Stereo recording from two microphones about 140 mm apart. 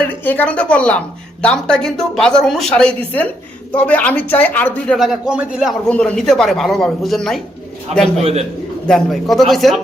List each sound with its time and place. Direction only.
0.0 s a woman's voice: 10° left (ahead or behind)
4.9 s speech: 5° right (ahead or behind)
5.9 s speech: 5° left (ahead or behind)
8.0 s a man's voice: 50° right (ahead or behind)
8.9 s speech: centre (ahead or behind)